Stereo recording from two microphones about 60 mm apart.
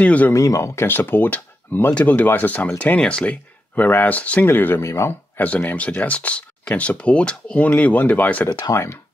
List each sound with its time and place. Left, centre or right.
0.0 s speech: left
0.3 s speech: left
0.8 s speech: left
2.0 s speech: left
3.0 s speech: centre
3.7 s speech: left
4.5 s speech: left
4.8 s speech: left
5.4 s speech: left
8.7 s speech: left